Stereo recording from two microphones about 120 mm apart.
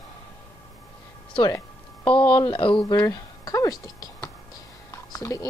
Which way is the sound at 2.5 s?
45° left (ahead or behind).